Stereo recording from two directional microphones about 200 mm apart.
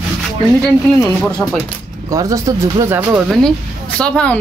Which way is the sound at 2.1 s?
15° right (ahead or behind).